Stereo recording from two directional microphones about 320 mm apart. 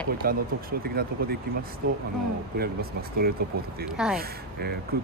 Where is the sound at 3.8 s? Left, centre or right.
Centre.